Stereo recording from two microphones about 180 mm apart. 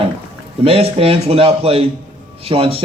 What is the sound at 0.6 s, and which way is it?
Speech, 30° right (ahead or behind).